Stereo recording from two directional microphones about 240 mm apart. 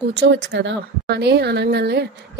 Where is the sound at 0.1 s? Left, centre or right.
Right.